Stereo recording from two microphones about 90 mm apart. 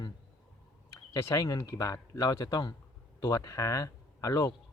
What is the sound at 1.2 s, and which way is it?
Speech, 40° left (ahead or behind).